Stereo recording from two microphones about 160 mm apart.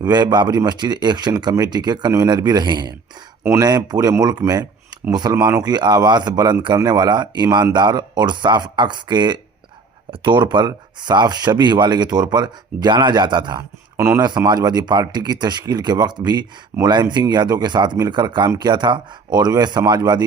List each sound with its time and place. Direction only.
0.0 s speech: 25° right (ahead or behind)
13.9 s speech: 15° right (ahead or behind)
14.2 s speech: 25° right (ahead or behind)